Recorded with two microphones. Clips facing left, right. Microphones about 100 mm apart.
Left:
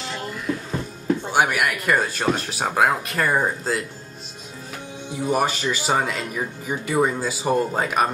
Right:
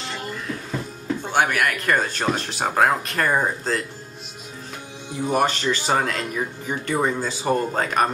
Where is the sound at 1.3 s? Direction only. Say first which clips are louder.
Right 1 dB; 10° left (ahead or behind).